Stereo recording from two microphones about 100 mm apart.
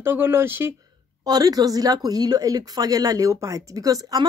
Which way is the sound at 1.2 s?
40° right (ahead or behind).